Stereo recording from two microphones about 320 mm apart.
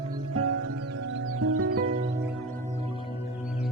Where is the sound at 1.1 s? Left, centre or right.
Right.